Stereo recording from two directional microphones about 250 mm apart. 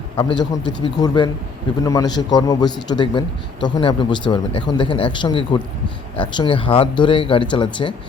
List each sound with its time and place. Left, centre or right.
0.2 s a man's voice: centre